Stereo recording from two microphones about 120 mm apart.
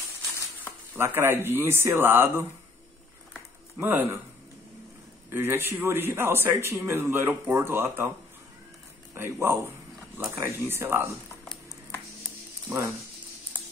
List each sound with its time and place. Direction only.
0.9 s a man's voice: 20° right (ahead or behind)
3.8 s speech: 15° right (ahead or behind)
5.3 s a man's voice: 20° right (ahead or behind)
9.1 s a man's voice: 20° right (ahead or behind)
12.6 s speech: 20° right (ahead or behind)